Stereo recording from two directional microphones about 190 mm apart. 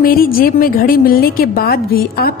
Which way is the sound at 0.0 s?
50° left (ahead or behind).